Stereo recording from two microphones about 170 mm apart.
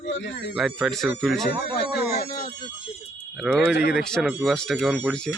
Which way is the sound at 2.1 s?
60° left (ahead or behind).